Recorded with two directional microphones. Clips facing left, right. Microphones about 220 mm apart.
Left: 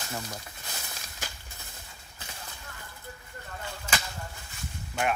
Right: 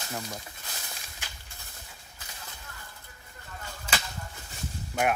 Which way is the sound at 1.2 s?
40° left (ahead or behind).